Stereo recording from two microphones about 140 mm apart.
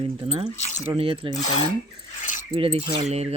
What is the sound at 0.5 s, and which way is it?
Speech, 60° left (ahead or behind).